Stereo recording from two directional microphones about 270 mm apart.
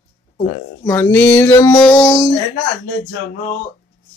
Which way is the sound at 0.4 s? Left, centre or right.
Left.